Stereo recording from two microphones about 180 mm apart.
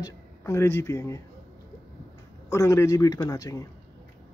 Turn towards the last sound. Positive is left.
turn(degrees=20)  # may be behind; listen again after turning